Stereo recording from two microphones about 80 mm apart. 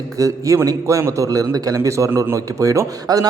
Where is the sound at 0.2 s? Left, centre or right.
Right.